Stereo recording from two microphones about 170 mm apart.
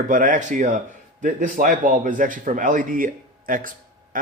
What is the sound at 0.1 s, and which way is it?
Speech, 50° right (ahead or behind).